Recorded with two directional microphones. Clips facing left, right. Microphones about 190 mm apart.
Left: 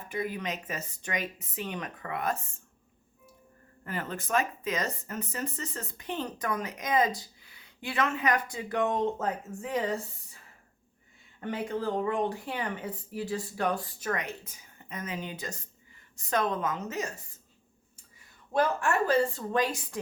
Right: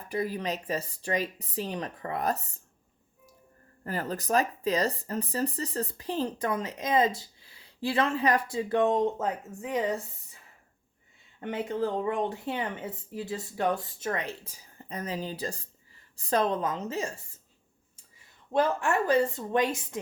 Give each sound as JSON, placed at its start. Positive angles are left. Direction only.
{"t": 0.1, "sound": "speech", "side_deg": -35}
{"t": 3.8, "sound": "speech", "side_deg": -40}
{"t": 11.3, "sound": "speech", "side_deg": -20}
{"t": 18.5, "sound": "speech", "side_deg": -20}